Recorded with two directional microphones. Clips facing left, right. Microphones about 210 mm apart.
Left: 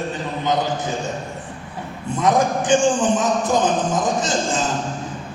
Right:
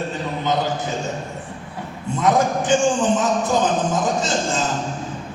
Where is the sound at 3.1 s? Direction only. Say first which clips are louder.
Even; 15° left (ahead or behind).